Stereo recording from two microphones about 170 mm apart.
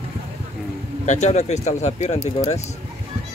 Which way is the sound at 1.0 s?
45° left (ahead or behind).